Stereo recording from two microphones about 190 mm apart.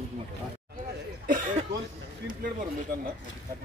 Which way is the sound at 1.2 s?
45° right (ahead or behind).